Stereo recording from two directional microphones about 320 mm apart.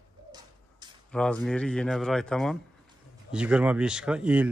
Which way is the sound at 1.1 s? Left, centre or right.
Centre.